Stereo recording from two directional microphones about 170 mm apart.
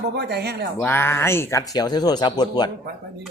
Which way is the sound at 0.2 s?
75° right (ahead or behind).